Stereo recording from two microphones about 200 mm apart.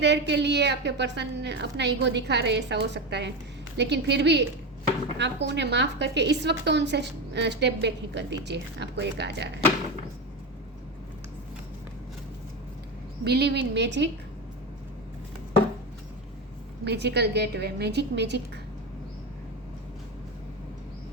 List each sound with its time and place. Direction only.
0.0 s a woman's voice: 60° right (ahead or behind)
13.2 s a woman's voice: 55° right (ahead or behind)
16.8 s a woman's voice: 55° right (ahead or behind)